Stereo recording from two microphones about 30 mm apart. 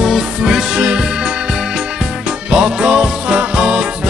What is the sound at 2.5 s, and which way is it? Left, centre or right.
Music, right.